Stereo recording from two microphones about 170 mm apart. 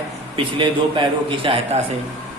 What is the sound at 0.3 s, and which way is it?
A man's voice, 30° right (ahead or behind).